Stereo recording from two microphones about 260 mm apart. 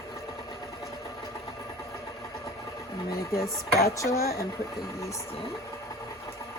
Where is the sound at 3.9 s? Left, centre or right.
Centre.